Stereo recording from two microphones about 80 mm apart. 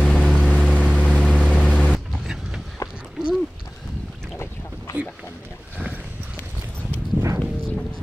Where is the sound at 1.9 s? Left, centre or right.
Centre.